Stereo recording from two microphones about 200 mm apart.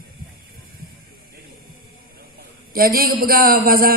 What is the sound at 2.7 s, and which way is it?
Speech, 45° right (ahead or behind).